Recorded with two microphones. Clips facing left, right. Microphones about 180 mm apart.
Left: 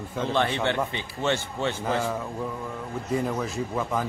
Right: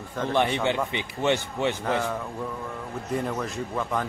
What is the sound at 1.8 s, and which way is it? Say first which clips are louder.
Speech: even; 10° left (ahead or behind).